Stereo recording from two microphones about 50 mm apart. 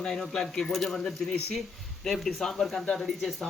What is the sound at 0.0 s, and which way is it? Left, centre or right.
Speech, centre.